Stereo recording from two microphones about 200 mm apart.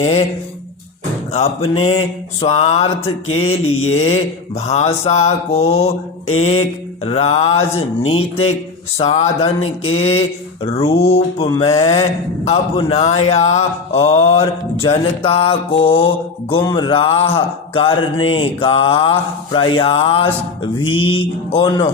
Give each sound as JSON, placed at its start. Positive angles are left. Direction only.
{"t": 0.0, "sound": "speech", "side_deg": 30}
{"t": 1.3, "sound": "speech", "side_deg": 30}
{"t": 9.0, "sound": "speech", "side_deg": 35}